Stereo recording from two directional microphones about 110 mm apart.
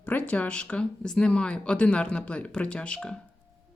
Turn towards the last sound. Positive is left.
turn(degrees=10)  # may be behind; listen again after turning